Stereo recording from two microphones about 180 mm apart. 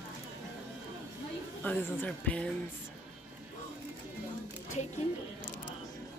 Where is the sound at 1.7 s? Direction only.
10° left (ahead or behind).